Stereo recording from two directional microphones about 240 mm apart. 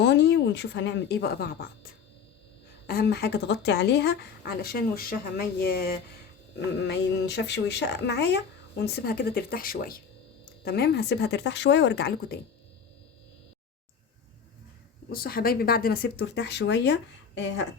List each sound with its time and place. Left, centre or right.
0.0 s speech: left
15.1 s speech: left